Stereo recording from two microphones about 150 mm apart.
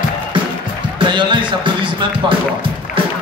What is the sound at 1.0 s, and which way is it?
Speech, 30° right (ahead or behind).